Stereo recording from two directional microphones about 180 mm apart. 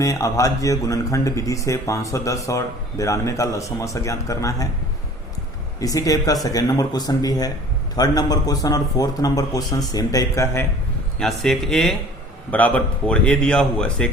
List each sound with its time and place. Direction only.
0.0 s speech: 20° left (ahead or behind)
5.8 s speech: 20° left (ahead or behind)
11.2 s a man's voice: centre (ahead or behind)